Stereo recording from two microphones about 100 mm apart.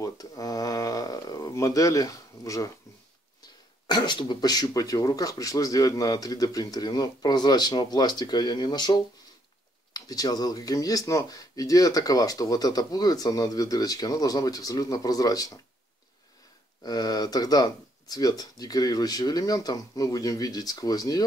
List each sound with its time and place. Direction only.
0.0 s a sound: 40° left (ahead or behind)
3.8 s speech: 45° left (ahead or behind)
16.8 s speech: 40° left (ahead or behind)